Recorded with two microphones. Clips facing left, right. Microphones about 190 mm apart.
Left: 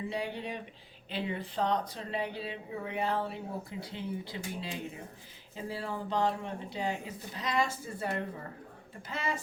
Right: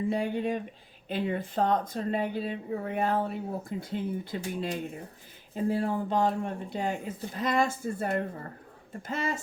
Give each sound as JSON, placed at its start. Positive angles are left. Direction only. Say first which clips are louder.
{"t": 0.1, "sound": "speech", "louder": "right 7 dB", "side_deg": -50}